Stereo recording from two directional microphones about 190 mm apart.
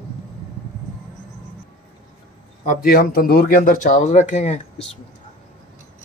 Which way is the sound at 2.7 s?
50° left (ahead or behind).